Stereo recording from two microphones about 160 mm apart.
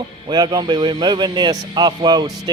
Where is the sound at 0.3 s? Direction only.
25° right (ahead or behind).